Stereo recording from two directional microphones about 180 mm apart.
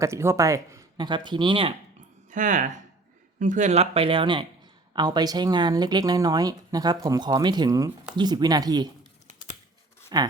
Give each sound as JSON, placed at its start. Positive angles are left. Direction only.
{"t": 0.0, "sound": "speech", "side_deg": -15}
{"t": 2.3, "sound": "speech", "side_deg": -45}
{"t": 10.1, "sound": "speech", "side_deg": -20}